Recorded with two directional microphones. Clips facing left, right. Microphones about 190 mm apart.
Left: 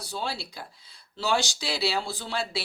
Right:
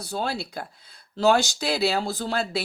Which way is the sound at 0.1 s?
50° right (ahead or behind).